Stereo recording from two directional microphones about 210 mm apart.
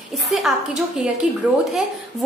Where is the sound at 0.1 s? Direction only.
Centre (ahead or behind).